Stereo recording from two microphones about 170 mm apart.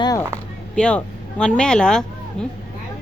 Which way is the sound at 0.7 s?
5° left (ahead or behind).